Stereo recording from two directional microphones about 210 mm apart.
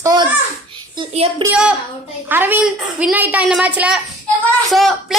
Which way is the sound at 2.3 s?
10° right (ahead or behind).